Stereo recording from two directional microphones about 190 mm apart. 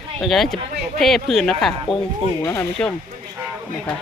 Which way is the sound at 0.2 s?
Centre (ahead or behind).